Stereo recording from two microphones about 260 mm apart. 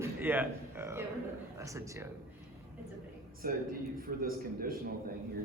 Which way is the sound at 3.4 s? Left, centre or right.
Right.